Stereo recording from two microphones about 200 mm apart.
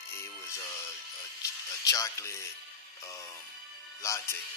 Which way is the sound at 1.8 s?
15° left (ahead or behind).